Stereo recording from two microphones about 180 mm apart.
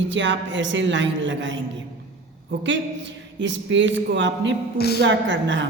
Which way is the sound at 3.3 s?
90° right.